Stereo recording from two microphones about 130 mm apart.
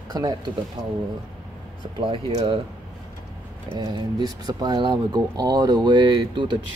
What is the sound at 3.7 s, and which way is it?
Speech, 35° right (ahead or behind).